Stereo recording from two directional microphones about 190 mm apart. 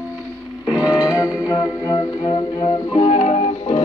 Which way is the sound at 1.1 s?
20° left (ahead or behind).